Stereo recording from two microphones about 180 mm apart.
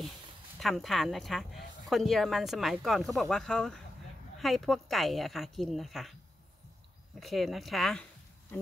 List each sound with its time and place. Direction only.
0.6 s speech: centre (ahead or behind)
7.2 s speech: centre (ahead or behind)